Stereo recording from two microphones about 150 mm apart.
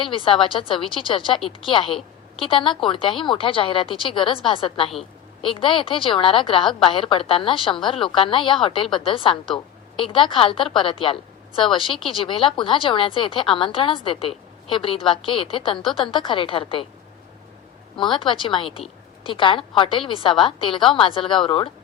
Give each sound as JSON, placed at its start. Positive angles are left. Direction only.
{"t": 0.0, "sound": "a woman's voice", "side_deg": 35}
{"t": 17.9, "sound": "a woman's voice", "side_deg": 35}